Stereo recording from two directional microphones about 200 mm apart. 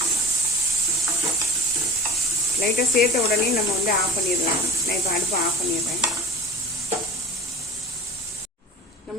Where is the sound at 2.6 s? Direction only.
50° left (ahead or behind).